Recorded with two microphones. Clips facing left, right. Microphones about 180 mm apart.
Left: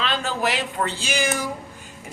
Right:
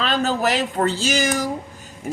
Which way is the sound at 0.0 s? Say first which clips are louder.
Right 4 dB; 40° right (ahead or behind).